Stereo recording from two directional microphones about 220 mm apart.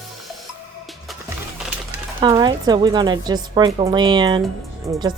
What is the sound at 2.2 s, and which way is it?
Speech, 20° right (ahead or behind).